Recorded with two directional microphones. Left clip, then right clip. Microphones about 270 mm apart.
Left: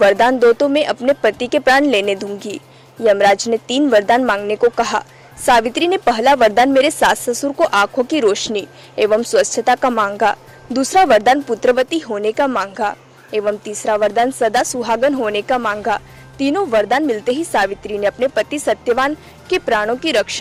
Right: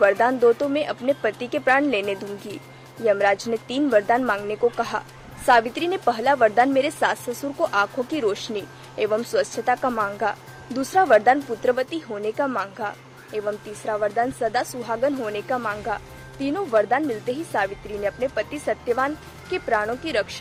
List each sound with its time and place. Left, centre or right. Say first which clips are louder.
0.0 s a woman's voice: left 6 dB; left